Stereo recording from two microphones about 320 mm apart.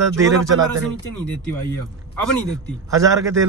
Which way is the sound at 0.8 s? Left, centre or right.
Centre.